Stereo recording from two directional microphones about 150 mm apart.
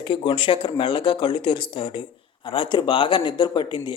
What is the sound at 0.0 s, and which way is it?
Speech, 35° left (ahead or behind).